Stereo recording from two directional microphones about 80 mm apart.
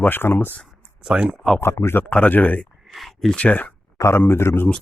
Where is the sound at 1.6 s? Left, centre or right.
Left.